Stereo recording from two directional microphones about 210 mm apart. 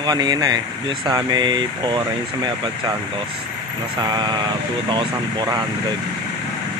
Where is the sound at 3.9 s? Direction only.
20° right (ahead or behind).